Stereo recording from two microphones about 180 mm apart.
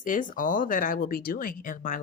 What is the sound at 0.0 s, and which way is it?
Speech, 45° left (ahead or behind).